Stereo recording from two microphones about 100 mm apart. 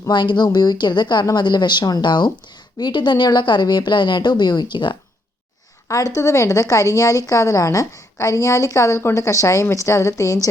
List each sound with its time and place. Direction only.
0.1 s a woman's voice: 50° left (ahead or behind)
5.9 s a woman's voice: 30° left (ahead or behind)